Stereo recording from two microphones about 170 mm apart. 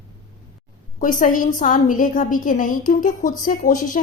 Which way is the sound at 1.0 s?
50° left (ahead or behind).